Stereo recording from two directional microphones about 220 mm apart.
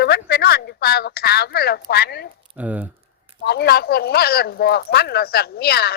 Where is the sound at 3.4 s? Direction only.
45° left (ahead or behind).